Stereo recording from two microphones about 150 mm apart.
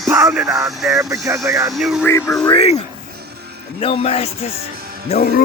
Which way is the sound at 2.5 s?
40° left (ahead or behind).